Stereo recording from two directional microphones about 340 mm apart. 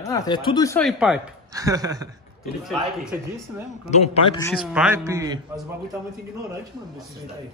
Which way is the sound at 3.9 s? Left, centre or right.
Centre.